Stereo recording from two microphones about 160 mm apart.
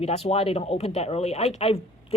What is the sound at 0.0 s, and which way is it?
Speech, 40° left (ahead or behind).